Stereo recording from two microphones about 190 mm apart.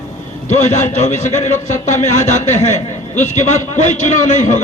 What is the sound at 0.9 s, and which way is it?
Speech, 40° left (ahead or behind).